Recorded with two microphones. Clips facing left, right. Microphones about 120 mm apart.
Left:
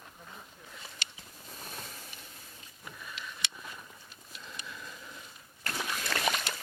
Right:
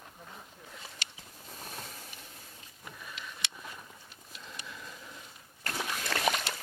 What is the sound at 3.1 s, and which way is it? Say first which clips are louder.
Vehicle: left 1 dB; 40° right (ahead or behind).